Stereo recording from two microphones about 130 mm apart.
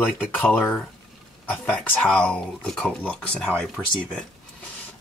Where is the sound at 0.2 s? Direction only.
15° left (ahead or behind).